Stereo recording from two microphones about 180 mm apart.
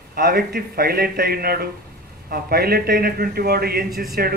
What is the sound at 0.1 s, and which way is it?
Speech, 55° right (ahead or behind).